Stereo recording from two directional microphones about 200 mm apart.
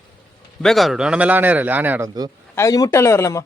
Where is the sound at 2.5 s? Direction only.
15° left (ahead or behind).